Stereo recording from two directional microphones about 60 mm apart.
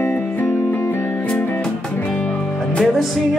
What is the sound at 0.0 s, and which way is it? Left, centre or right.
Music, left.